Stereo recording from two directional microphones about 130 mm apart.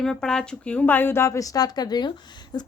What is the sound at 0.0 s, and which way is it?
A woman's voice, 5° left (ahead or behind).